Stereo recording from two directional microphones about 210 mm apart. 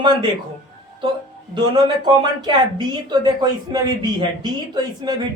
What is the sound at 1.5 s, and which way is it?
Speech, 20° right (ahead or behind).